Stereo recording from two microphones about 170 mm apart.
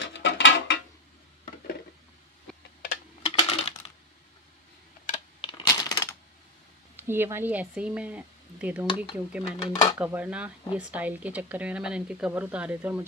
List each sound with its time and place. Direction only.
0.0 s a sound: 90° left
3.3 s typing: 35° left (ahead or behind)
5.4 s coin: 25° left (ahead or behind)
7.0 s speech: 15° right (ahead or behind)
8.8 s dishes: 30° left (ahead or behind)
9.1 s speech: 5° right (ahead or behind)
9.6 s dishes: 25° left (ahead or behind)
9.9 s speech: 10° right (ahead or behind)